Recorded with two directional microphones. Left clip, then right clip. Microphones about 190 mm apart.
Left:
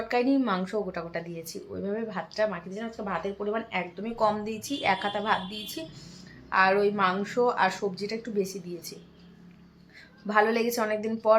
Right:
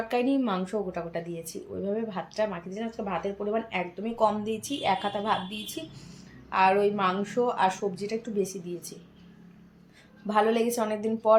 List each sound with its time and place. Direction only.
0.1 s a woman's voice: 5° right (ahead or behind)
10.2 s a woman's voice: 5° right (ahead or behind)